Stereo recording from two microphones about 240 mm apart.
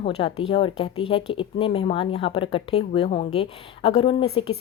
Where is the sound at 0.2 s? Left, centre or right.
Left.